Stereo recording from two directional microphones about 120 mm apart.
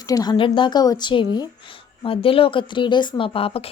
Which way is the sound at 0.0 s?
30° left (ahead or behind).